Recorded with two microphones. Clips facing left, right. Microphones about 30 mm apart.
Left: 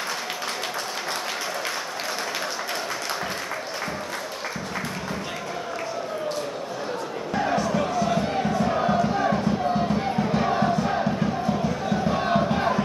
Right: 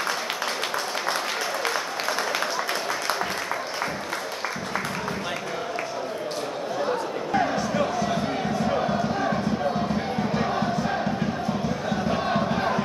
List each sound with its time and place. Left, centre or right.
7.5 s music: centre
10.8 s crowd: centre
12.1 s crowd: centre